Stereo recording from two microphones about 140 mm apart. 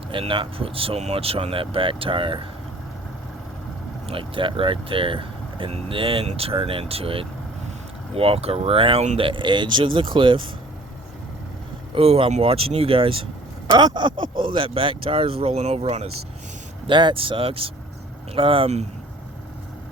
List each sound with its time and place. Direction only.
0.1 s speech: 40° right (ahead or behind)
4.0 s speech: 40° right (ahead or behind)
11.9 s speech: 45° right (ahead or behind)
16.8 s speech: 35° right (ahead or behind)